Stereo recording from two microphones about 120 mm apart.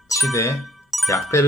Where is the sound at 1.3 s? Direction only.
25° left (ahead or behind).